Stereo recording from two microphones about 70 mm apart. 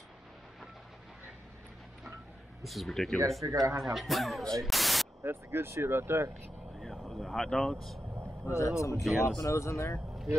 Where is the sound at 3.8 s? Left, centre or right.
Centre.